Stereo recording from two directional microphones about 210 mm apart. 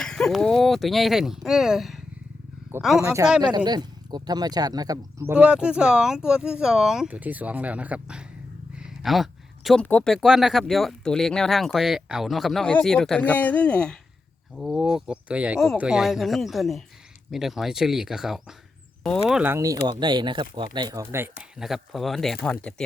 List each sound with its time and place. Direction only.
0.0 s speech: 5° left (ahead or behind)
3.0 s speech: 15° right (ahead or behind)
5.3 s speech: 5° right (ahead or behind)
21.6 s speech: centre (ahead or behind)